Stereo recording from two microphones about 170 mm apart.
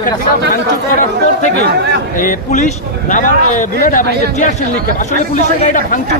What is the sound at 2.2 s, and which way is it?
A man's voice, 50° left (ahead or behind).